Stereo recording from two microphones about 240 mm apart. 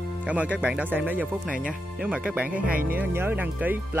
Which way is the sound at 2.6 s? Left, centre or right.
Right.